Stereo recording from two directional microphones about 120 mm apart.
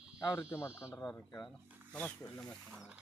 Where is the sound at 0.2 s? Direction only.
30° left (ahead or behind).